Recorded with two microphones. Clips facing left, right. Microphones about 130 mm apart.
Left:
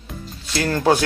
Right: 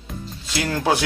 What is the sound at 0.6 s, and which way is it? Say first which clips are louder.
Speech: left 3 dB; 15° right (ahead or behind).